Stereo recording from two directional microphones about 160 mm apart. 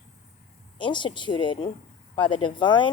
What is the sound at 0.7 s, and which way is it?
Speech, 30° left (ahead or behind).